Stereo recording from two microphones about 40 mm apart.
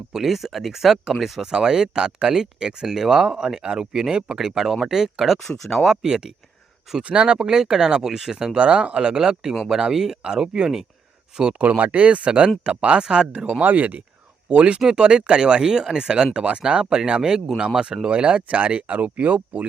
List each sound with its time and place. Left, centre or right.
0.1 s speech: centre
7.1 s speech: right
7.4 s speech: centre
8.5 s speech: right
11.9 s speech: right
13.5 s speech: right
14.5 s speech: right
14.8 s speech: centre
18.5 s speech: right